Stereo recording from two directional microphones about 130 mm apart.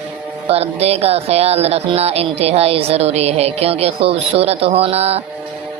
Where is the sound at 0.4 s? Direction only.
50° right (ahead or behind).